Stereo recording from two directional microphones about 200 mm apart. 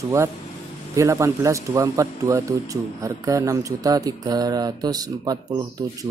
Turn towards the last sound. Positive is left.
turn(degrees=-20)  # may be behind; listen again after turning